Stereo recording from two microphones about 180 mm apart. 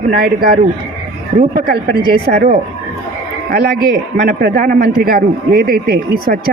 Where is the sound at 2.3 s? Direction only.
50° right (ahead or behind).